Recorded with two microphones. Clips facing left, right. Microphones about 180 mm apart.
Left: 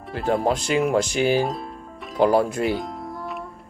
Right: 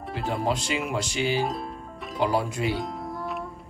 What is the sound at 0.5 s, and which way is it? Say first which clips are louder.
Speech: left 7 dB; 50° left (ahead or behind).